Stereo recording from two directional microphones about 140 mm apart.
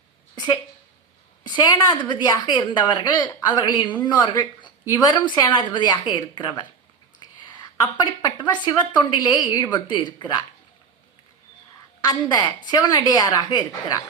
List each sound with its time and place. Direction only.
1.5 s a woman's voice: 30° left (ahead or behind)
8.2 s a woman's voice: 35° left (ahead or behind)
12.0 s a woman's voice: 30° left (ahead or behind)